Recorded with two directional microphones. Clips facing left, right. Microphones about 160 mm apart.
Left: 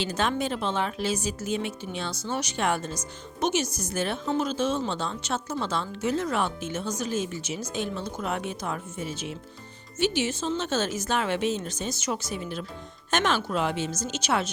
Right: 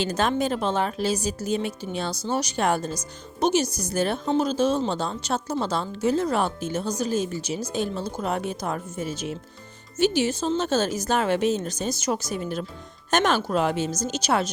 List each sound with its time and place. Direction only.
0.0 s a woman's voice: 40° right (ahead or behind)